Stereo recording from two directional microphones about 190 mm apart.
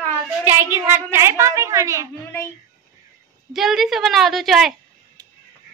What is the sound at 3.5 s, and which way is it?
Speech, centre (ahead or behind).